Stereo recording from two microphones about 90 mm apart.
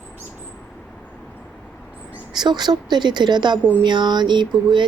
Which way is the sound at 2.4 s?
50° right (ahead or behind).